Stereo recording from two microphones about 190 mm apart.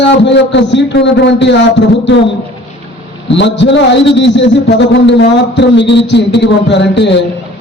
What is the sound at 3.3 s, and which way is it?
A man's voice, 70° left (ahead or behind).